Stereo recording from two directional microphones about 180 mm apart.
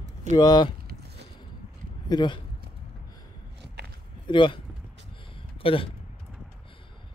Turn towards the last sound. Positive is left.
turn(degrees=30)  # may be behind; listen again after turning